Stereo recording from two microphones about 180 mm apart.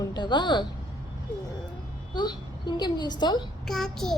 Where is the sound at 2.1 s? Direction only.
25° left (ahead or behind).